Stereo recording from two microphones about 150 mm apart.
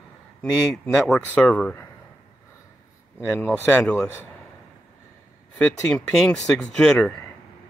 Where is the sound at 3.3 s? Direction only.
10° left (ahead or behind).